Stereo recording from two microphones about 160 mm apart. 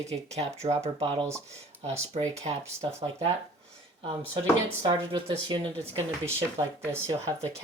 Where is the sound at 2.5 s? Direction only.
35° right (ahead or behind).